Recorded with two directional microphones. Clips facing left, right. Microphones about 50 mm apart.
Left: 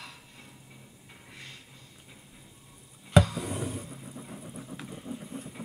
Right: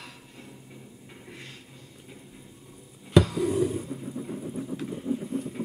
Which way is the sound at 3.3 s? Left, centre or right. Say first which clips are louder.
Right 9 dB; left.